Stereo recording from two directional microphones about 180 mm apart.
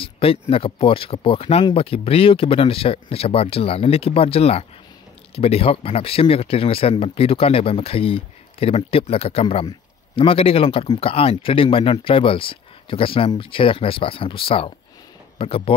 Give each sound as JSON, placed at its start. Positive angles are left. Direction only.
{"t": 0.0, "sound": "speech", "side_deg": 30}